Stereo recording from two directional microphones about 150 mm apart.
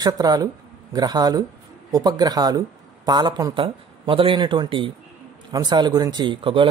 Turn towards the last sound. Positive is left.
turn(degrees=-35)  # may be behind; listen again after turning